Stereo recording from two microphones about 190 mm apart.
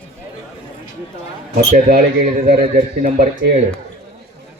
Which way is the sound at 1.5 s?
50° right (ahead or behind).